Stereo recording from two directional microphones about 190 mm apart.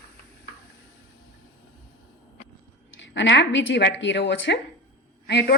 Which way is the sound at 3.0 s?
75° left (ahead or behind).